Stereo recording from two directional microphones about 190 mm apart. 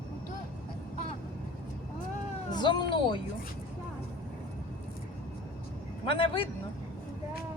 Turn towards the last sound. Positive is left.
turn(degrees=25)  # may be behind; listen again after turning